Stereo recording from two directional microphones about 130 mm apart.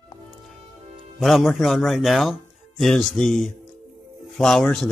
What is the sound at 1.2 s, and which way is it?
Speech, centre (ahead or behind).